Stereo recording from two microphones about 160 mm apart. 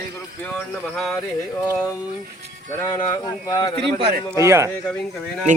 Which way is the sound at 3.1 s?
25° left (ahead or behind).